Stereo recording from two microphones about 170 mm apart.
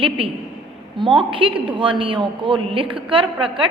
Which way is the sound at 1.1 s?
30° right (ahead or behind).